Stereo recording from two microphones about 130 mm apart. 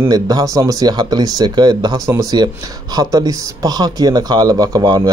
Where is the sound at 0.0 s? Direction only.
30° right (ahead or behind).